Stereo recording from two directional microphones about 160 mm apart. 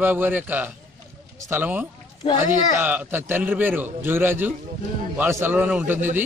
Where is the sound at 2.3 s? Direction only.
50° left (ahead or behind).